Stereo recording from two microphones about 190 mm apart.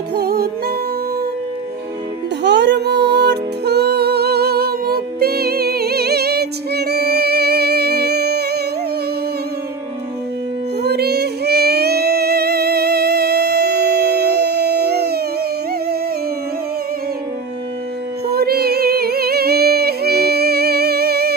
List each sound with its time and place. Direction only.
0.1 s music: 55° right (ahead or behind)
2.4 s music: 65° right (ahead or behind)
10.8 s music: 55° right (ahead or behind)
18.3 s music: 55° right (ahead or behind)